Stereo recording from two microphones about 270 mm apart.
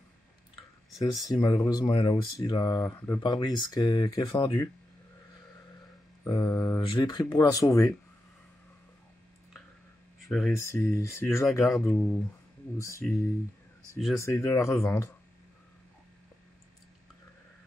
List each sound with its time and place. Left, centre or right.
1.4 s speech: centre
6.2 s speech: centre
10.2 s speech: centre
13.9 s speech: centre